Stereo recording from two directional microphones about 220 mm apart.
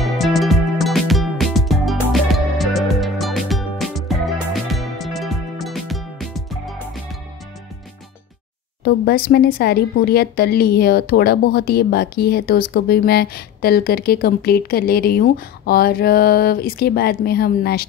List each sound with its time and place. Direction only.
0.0 s music: centre (ahead or behind)
8.8 s speech: 45° left (ahead or behind)